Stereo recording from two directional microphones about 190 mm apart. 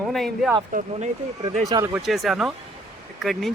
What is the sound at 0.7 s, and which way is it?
Speech, 45° right (ahead or behind).